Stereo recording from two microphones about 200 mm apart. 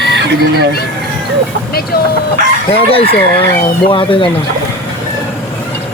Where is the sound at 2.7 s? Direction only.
30° left (ahead or behind).